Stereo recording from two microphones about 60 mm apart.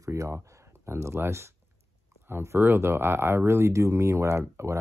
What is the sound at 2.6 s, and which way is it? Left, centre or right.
Speech, right.